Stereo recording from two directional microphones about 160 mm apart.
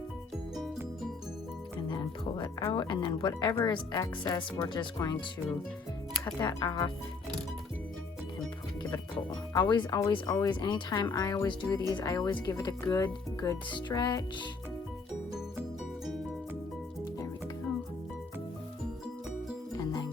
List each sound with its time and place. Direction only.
1.9 s music: 30° left (ahead or behind)
2.7 s speech: 30° left (ahead or behind)
6.4 s speech: 25° left (ahead or behind)
9.5 s speech: 30° left (ahead or behind)
19.7 s music: 25° left (ahead or behind)